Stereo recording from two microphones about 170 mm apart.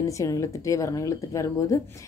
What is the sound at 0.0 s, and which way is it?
A woman's voice, 20° left (ahead or behind).